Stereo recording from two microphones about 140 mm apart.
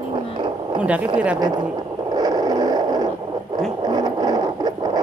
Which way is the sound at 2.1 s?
30° right (ahead or behind).